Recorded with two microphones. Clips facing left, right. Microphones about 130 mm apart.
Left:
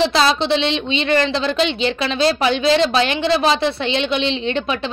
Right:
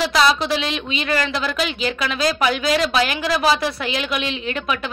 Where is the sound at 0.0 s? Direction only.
25° left (ahead or behind).